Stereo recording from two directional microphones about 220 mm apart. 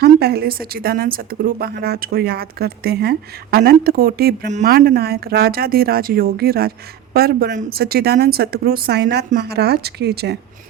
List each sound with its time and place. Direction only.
0.0 s speech: 45° right (ahead or behind)